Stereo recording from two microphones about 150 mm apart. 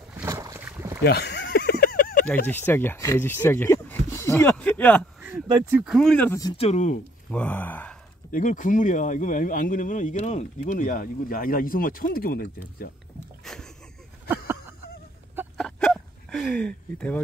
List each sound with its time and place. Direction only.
0.2 s boat: 20° right (ahead or behind)
1.0 s a sound: 90° left; by 2.2 s 75° left (ahead or behind)
2.2 s speech: 10° left (ahead or behind)
5.7 s speech: 5° right (ahead or behind)
6.1 s speech: 15° left (ahead or behind)
6.5 s speech: 45° left (ahead or behind)
7.2 s speech: 10° left (ahead or behind)
8.3 s speech: 60° left (ahead or behind)
13.4 s boat: centre (ahead or behind)
15.5 s a sound: 5° left (ahead or behind)